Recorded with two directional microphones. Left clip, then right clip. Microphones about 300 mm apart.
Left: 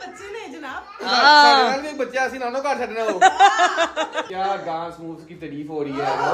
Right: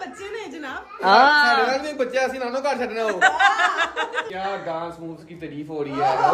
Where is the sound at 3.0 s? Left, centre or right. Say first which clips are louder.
Left 3 dB; centre.